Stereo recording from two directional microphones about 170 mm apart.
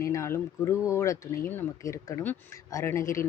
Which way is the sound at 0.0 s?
15° left (ahead or behind).